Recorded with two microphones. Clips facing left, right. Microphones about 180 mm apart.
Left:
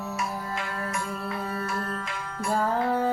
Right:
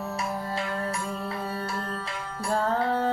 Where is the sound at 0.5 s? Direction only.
30° right (ahead or behind).